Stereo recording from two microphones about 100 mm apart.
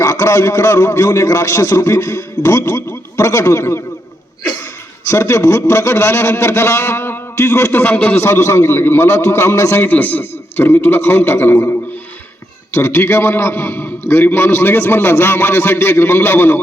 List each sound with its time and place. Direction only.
0.0 s a man's voice: 30° left (ahead or behind)
5.0 s a man's voice: 25° left (ahead or behind)
12.7 s a man's voice: 25° left (ahead or behind)